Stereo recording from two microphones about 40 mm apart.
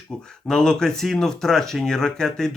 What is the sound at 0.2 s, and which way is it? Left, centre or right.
Speech, centre.